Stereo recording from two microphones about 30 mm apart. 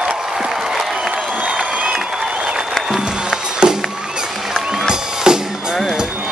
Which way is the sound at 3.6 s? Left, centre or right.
Right.